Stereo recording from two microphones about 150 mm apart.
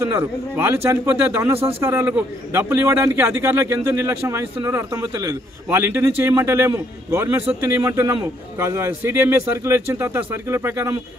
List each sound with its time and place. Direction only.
0.1 s a man's voice: 15° right (ahead or behind)